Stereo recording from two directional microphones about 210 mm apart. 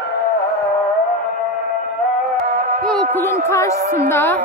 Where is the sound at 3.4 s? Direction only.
15° left (ahead or behind).